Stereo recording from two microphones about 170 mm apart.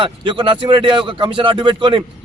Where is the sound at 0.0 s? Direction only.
30° right (ahead or behind).